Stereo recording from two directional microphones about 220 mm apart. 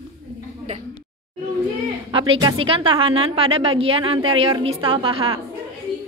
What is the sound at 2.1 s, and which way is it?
A woman's voice, 25° right (ahead or behind).